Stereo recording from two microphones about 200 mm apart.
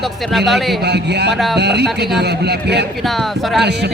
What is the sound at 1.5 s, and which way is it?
Speech, 55° right (ahead or behind).